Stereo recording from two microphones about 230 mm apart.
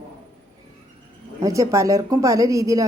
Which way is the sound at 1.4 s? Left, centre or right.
Centre.